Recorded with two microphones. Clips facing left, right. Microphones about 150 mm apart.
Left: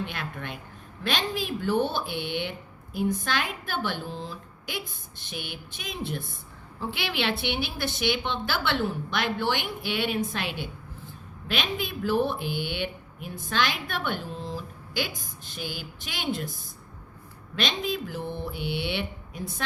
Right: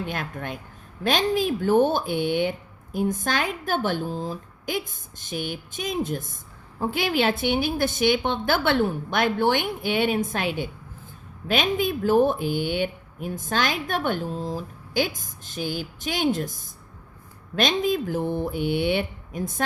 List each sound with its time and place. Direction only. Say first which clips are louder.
0.0 s a woman's voice: right 4 dB; 45° right (ahead or behind)